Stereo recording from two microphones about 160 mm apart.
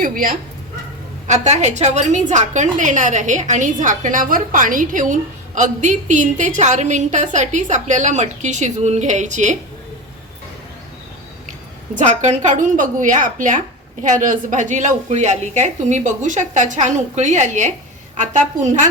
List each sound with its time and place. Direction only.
0.0 s speech: 60° right (ahead or behind)
1.3 s a woman's voice: 45° right (ahead or behind)
11.9 s a woman's voice: 50° right (ahead or behind)